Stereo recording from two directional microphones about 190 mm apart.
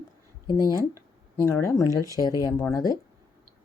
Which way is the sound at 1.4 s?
15° left (ahead or behind).